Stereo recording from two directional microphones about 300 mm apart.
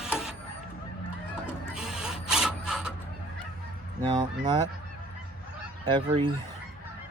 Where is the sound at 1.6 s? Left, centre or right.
Centre.